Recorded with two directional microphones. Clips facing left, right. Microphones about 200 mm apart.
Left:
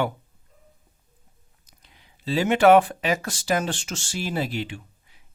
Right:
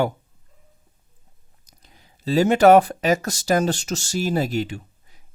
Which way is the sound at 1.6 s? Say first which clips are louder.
Right 3 dB; 40° right (ahead or behind).